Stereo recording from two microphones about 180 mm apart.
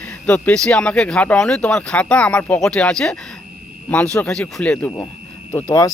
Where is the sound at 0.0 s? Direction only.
10° left (ahead or behind).